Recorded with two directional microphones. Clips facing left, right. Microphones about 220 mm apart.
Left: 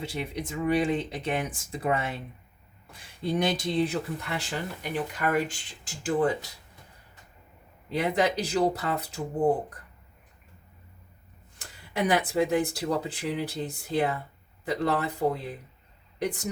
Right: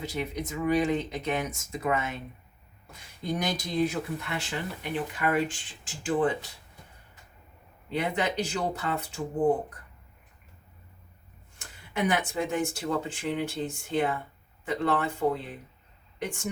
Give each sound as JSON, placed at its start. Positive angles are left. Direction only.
{"t": 0.0, "sound": "speech", "side_deg": 30}
{"t": 7.9, "sound": "speech", "side_deg": 35}
{"t": 11.6, "sound": "speech", "side_deg": 35}